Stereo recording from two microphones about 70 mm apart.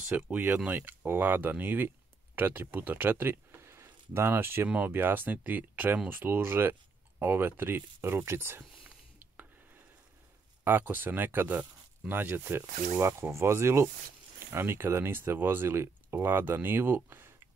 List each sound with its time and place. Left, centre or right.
0.0 s speech: right
10.6 s speech: right
13.0 s speech: right